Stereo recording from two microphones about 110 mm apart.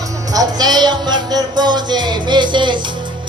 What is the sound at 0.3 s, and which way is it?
Music, 40° right (ahead or behind).